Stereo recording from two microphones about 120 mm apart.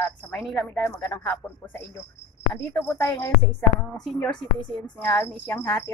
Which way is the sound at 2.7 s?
20° left (ahead or behind).